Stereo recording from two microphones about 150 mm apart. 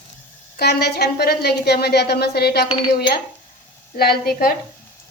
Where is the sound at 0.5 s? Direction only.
90° left.